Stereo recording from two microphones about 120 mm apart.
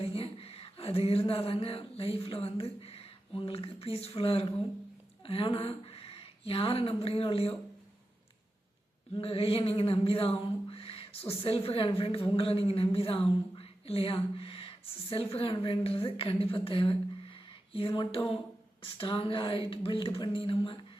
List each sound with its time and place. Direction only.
0.0 s a sound: 55° left (ahead or behind)
5.2 s speech: 50° left (ahead or behind)
9.1 s a woman's voice: 50° left (ahead or behind)